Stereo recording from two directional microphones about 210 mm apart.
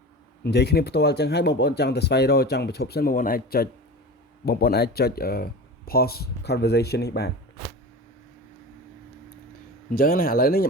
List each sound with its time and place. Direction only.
0.4 s speech: 50° left (ahead or behind)
9.9 s speech: 45° left (ahead or behind)